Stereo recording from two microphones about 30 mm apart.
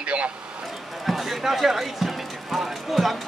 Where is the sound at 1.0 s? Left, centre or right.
Centre.